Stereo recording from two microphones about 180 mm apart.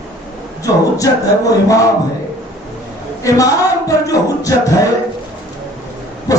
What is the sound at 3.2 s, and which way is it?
Speech, 20° left (ahead or behind).